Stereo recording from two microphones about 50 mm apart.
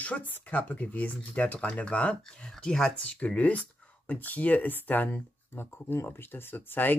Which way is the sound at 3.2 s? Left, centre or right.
Left.